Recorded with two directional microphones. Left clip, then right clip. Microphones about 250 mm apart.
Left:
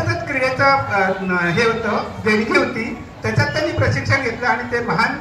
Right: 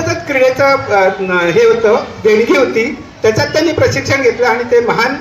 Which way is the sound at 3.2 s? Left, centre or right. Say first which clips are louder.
Right 8 dB; right.